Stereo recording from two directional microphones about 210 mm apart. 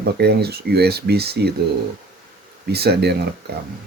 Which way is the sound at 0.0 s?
50° right (ahead or behind).